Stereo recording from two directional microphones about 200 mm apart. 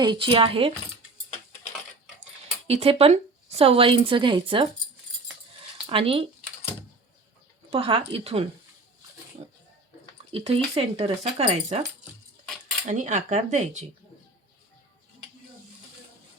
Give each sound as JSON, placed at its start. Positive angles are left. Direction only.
{"t": 0.0, "sound": "speech", "side_deg": -25}
{"t": 2.6, "sound": "speech", "side_deg": -30}
{"t": 5.7, "sound": "speech", "side_deg": -25}
{"t": 7.7, "sound": "speech", "side_deg": -30}
{"t": 10.3, "sound": "speech", "side_deg": -30}
{"t": 12.9, "sound": "speech", "side_deg": -40}